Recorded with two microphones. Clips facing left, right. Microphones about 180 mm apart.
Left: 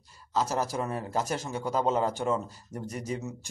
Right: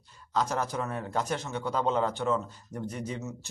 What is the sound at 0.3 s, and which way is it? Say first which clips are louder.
Speech: left 1 dB; 5° left (ahead or behind).